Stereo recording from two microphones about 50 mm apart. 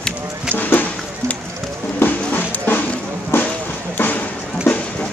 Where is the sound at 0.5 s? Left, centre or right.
Left.